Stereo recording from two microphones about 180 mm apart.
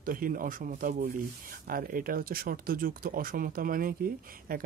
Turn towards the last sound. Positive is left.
turn(degrees=-55)  # may be behind; listen again after turning